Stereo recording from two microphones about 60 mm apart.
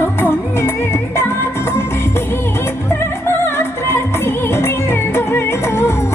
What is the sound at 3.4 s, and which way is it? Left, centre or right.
Music, left.